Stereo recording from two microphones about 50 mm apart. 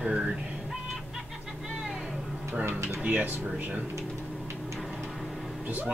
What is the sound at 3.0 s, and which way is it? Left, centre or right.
Speech, right.